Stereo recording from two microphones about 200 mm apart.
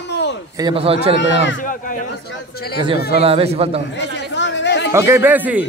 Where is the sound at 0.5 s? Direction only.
25° right (ahead or behind).